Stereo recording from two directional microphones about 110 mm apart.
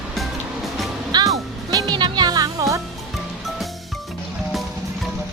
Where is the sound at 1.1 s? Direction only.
40° right (ahead or behind).